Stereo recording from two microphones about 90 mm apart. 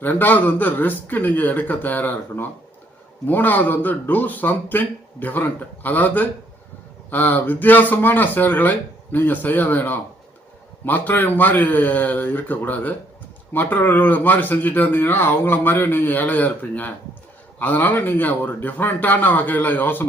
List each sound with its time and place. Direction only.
0.0 s speech: 20° left (ahead or behind)